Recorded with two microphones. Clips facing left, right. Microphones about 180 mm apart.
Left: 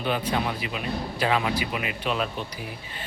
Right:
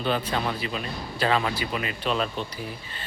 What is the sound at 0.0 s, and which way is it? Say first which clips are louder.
Speech: even; 10° left (ahead or behind).